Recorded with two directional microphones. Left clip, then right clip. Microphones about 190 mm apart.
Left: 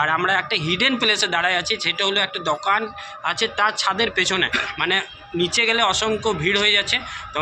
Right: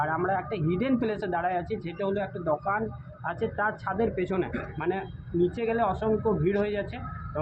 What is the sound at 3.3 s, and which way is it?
A man's voice, 15° left (ahead or behind).